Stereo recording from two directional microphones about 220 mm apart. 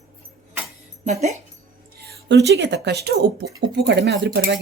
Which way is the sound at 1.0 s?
30° right (ahead or behind).